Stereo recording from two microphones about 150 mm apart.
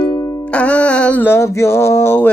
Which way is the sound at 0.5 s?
10° left (ahead or behind).